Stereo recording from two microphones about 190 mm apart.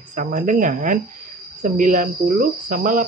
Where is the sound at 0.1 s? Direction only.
45° right (ahead or behind).